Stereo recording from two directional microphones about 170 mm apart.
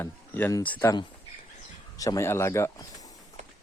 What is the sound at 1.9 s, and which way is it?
Speech, 20° left (ahead or behind).